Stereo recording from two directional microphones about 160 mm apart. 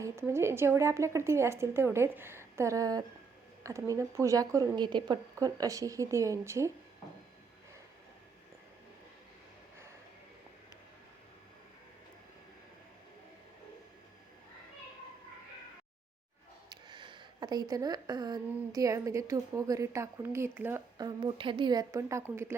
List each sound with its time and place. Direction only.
0.0 s a woman's voice: 15° right (ahead or behind)
16.6 s speech: 30° right (ahead or behind); by 20.8 s 15° right (ahead or behind)
21.0 s a woman's voice: 30° right (ahead or behind)